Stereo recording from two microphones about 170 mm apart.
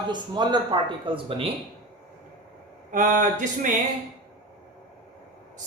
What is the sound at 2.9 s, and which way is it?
Speech, 50° right (ahead or behind).